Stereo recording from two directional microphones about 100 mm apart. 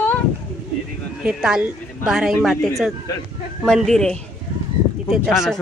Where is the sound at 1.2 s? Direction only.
10° right (ahead or behind); by 4.2 s 5° left (ahead or behind).